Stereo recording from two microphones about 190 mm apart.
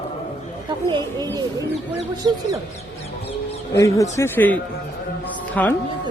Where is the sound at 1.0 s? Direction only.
20° right (ahead or behind).